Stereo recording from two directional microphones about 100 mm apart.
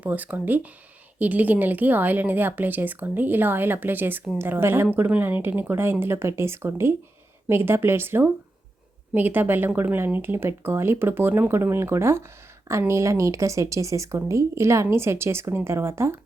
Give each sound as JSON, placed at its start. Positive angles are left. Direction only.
{"t": 0.0, "sound": "a woman's voice", "side_deg": -15}